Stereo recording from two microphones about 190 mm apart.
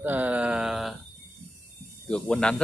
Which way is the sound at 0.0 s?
10° right (ahead or behind).